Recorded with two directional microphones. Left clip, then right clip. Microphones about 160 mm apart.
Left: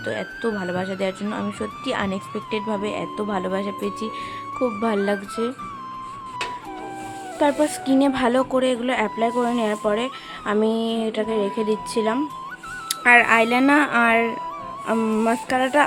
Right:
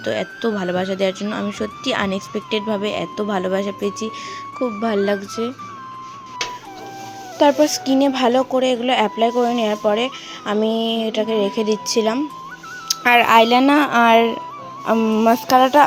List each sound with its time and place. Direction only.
0.0 s speech: 15° right (ahead or behind)
7.3 s speech: 15° right (ahead or behind)